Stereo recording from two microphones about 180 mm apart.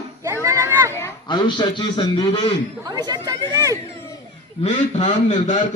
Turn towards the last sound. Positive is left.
turn(degrees=40)  # may be behind; listen again after turning